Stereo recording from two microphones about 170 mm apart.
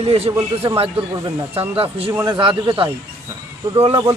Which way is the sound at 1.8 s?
35° right (ahead or behind).